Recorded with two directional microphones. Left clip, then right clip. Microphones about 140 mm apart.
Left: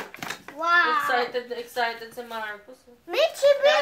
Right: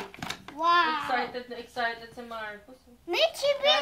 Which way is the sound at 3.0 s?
Centre (ahead or behind).